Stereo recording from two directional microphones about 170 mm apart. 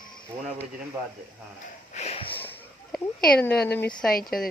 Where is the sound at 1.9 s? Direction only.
35° left (ahead or behind).